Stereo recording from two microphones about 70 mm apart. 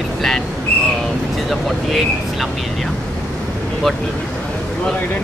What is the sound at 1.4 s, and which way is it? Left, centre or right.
Speech, centre.